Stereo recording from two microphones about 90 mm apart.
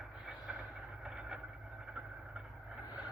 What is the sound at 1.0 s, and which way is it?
Vehicle, 10° right (ahead or behind).